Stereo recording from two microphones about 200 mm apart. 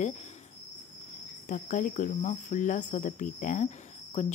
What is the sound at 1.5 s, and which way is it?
Speech, 40° left (ahead or behind).